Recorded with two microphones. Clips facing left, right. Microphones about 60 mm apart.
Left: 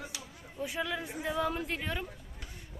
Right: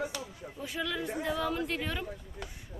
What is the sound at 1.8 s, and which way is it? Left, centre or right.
Speech, centre.